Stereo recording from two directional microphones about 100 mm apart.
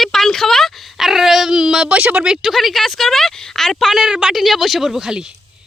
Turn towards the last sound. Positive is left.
turn(degrees=-5)  # may be behind; listen again after turning